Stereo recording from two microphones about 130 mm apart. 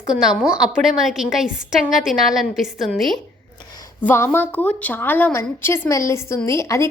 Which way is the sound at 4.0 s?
15° left (ahead or behind).